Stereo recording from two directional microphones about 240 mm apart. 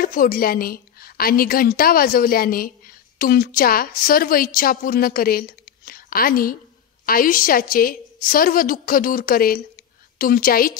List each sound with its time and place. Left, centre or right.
0.0 s a woman's voice: left